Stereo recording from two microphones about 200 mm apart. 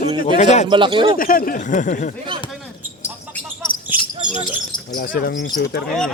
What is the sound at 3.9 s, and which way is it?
Bird, 10° right (ahead or behind).